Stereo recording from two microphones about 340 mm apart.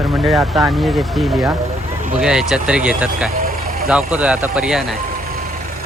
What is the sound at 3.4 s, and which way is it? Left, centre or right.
Vehicle, right.